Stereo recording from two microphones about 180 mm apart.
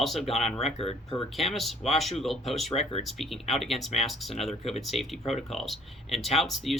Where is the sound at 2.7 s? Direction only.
35° left (ahead or behind).